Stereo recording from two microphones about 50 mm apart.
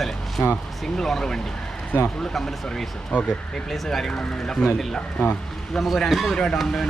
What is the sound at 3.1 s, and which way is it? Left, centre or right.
Speech, left.